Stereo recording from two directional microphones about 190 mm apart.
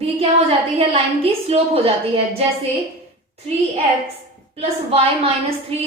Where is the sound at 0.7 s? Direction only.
30° right (ahead or behind).